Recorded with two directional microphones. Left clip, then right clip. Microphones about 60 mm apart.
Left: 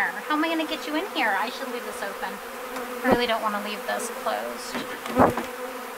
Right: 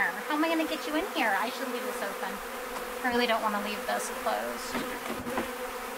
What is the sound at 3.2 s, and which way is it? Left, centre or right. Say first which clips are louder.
A man's voice: left 2 dB; left.